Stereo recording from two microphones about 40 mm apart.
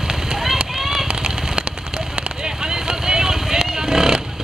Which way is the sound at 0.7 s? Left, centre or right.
Centre.